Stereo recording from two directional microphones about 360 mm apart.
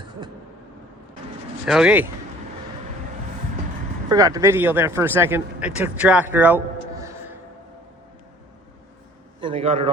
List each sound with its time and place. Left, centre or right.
1.6 s speech: centre
4.1 s speech: centre
9.4 s a man's voice: centre